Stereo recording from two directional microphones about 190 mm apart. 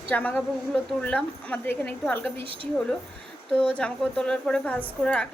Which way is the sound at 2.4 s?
30° right (ahead or behind).